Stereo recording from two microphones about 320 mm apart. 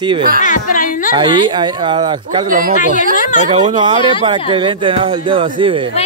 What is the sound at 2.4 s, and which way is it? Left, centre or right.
Speech, right.